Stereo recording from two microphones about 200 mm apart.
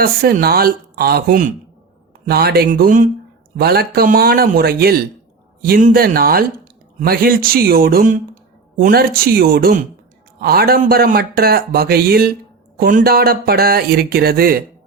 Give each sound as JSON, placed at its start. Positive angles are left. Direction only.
{"t": 0.0, "sound": "speech", "side_deg": -50}